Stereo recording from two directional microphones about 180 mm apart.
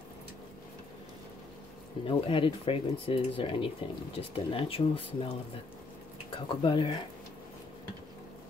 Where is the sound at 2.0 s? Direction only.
30° left (ahead or behind).